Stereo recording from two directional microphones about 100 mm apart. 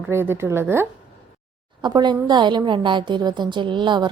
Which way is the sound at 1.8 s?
45° right (ahead or behind).